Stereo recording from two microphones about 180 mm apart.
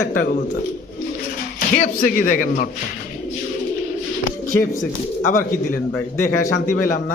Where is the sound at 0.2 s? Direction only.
55° left (ahead or behind).